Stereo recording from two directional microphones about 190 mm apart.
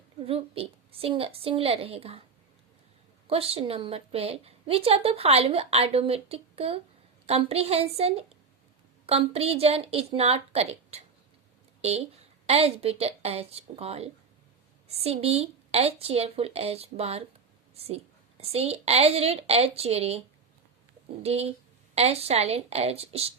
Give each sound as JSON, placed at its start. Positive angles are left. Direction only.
{"t": 0.2, "sound": "a woman's voice", "side_deg": -30}
{"t": 3.2, "sound": "a woman's voice", "side_deg": -30}